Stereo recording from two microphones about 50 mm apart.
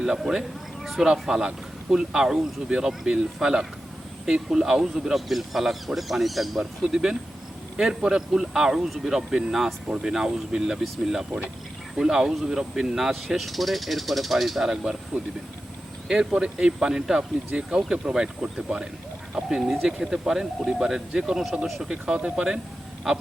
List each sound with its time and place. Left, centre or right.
0.9 s speech: centre
6.6 s speech: centre
14.6 s speech: centre
16.0 s speech: centre
17.5 s speech: right
19.3 s speech: centre